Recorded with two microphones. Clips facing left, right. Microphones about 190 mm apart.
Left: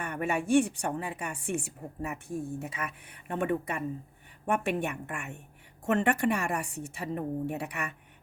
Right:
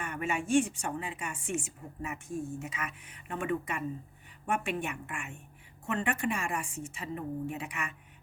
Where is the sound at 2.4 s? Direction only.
35° left (ahead or behind).